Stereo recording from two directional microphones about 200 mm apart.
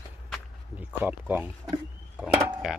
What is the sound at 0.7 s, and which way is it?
Speech, 10° right (ahead or behind).